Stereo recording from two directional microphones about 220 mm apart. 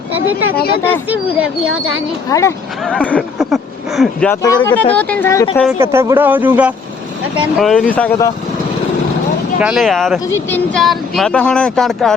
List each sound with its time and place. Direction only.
0.3 s speech: 70° right (ahead or behind)
1.1 s speech: 5° right (ahead or behind)
2.3 s speech: 15° left (ahead or behind)
2.9 s speech: 5° left (ahead or behind)
5.8 s speech: 10° right (ahead or behind); by 8.3 s 5° left (ahead or behind)
9.6 s speech: 5° right (ahead or behind)